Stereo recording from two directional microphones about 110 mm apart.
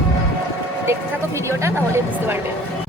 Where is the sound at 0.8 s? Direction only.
25° right (ahead or behind).